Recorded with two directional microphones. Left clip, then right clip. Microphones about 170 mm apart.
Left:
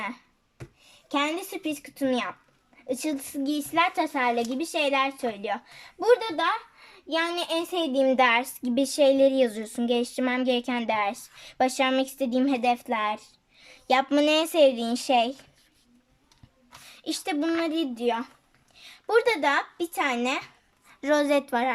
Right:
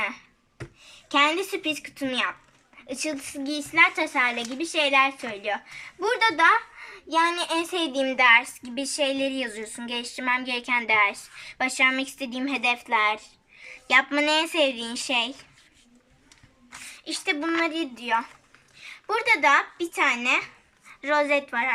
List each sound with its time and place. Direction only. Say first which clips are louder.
1.5 s a child's voice: right 4 dB; 40° left (ahead or behind)
7.1 s a child's voice: right 4 dB; 50° left (ahead or behind)
17.0 s a child's voice: right 1 dB; 50° left (ahead or behind)